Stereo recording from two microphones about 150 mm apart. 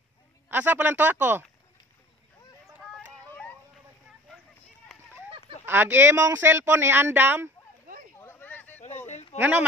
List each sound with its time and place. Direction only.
0.5 s speech: 10° right (ahead or behind)
2.8 s vehicle: centre (ahead or behind)
5.7 s speech: 15° right (ahead or behind)
8.2 s a sound: 15° left (ahead or behind)
9.0 s a sound: 50° left (ahead or behind)
9.4 s speech: 10° right (ahead or behind)